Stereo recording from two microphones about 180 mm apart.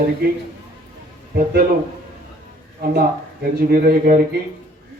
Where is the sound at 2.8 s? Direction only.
55° right (ahead or behind).